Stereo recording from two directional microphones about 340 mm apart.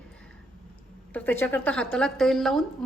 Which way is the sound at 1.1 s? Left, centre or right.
Centre.